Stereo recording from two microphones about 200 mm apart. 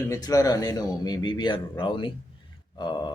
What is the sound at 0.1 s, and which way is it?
Speech, 15° left (ahead or behind).